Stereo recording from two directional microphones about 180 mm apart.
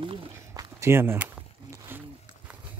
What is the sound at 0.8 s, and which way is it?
Speech, 15° right (ahead or behind).